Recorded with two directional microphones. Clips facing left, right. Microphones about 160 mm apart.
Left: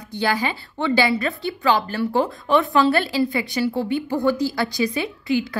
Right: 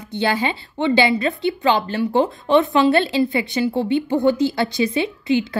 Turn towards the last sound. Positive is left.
turn(degrees=-25)  # may be behind; listen again after turning